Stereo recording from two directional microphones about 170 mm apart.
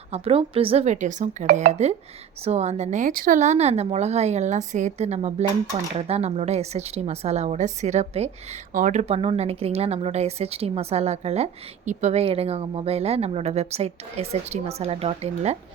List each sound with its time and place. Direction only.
0.1 s a woman's voice: 35° right (ahead or behind)